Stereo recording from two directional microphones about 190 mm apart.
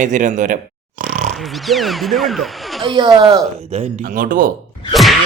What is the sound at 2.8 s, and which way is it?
Speech, 25° right (ahead or behind).